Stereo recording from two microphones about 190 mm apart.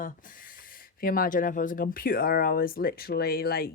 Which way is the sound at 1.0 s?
50° left (ahead or behind).